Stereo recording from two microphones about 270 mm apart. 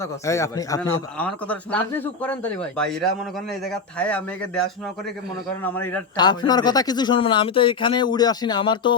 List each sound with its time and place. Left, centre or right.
0.3 s speech: centre
5.9 s speech: centre